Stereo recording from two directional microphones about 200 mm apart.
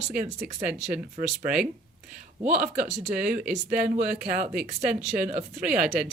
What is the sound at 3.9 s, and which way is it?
Speech, 45° right (ahead or behind).